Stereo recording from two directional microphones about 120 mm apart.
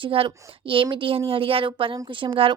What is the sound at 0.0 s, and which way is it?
A woman's voice, 45° right (ahead or behind).